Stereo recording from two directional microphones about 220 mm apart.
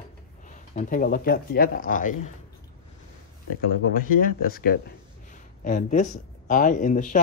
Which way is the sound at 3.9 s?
40° left (ahead or behind).